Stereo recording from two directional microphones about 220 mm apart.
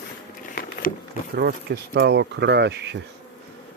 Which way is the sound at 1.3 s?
45° right (ahead or behind).